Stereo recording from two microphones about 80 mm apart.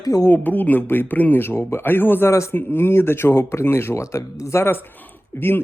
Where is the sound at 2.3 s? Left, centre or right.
Left.